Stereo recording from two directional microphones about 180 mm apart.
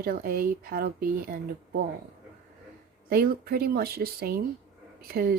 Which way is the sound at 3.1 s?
55° right (ahead or behind).